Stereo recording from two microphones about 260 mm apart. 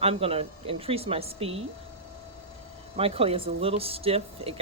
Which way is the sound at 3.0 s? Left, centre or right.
Right.